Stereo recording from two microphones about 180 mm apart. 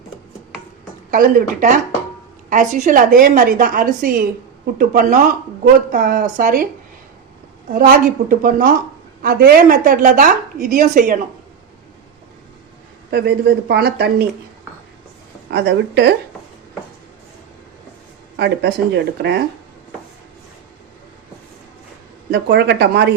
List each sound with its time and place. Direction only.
1.1 s a woman's voice: 45° right (ahead or behind)
7.7 s a woman's voice: 50° right (ahead or behind)
13.1 s speech: 65° right (ahead or behind)
15.4 s speech: 70° right (ahead or behind)
18.3 s speech: 70° right (ahead or behind)
22.3 s speech: 70° right (ahead or behind)